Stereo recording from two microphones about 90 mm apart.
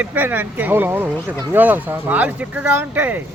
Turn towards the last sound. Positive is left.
turn(degrees=-20)  # may be behind; listen again after turning